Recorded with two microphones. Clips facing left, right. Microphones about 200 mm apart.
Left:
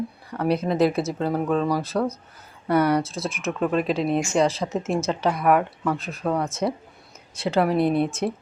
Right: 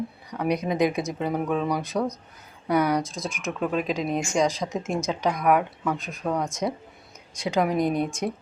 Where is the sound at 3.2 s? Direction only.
5° left (ahead or behind).